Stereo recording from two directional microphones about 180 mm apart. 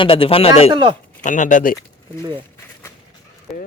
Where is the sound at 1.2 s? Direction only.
45° left (ahead or behind).